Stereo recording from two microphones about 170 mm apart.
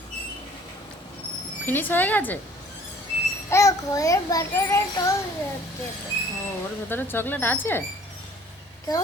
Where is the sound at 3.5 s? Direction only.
20° left (ahead or behind).